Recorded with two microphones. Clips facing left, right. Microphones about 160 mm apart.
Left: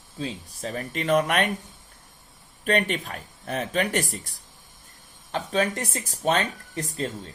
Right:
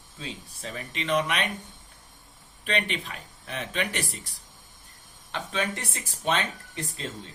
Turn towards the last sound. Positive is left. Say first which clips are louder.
# left 6 dB
turn(degrees=40)  # may be behind; listen again after turning